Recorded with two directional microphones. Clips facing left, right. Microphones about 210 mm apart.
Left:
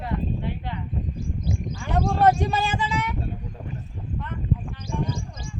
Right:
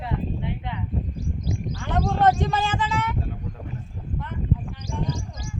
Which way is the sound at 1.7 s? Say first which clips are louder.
Even; 10° left (ahead or behind).